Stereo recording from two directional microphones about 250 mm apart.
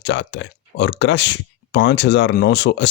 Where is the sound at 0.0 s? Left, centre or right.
Left.